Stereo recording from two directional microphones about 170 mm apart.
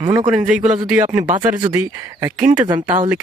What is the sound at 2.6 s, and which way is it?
Speech, 25° right (ahead or behind).